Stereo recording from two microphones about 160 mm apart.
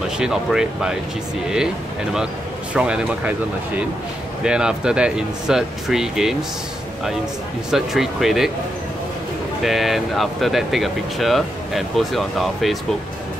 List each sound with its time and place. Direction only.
0.2 s speech: 5° right (ahead or behind)
2.7 s speech: 10° right (ahead or behind)
7.7 s speech: centre (ahead or behind)
9.6 s speech: centre (ahead or behind)